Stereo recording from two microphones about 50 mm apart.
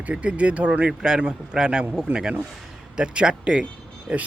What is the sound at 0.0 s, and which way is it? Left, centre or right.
Speech, right.